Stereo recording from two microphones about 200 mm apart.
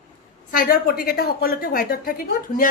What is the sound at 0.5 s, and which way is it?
A woman's voice, 50° left (ahead or behind).